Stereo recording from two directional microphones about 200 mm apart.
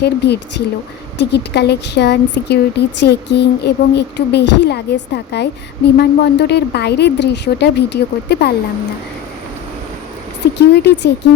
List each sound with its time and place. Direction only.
0.0 s speech: 55° left (ahead or behind)
10.4 s speech: 55° left (ahead or behind)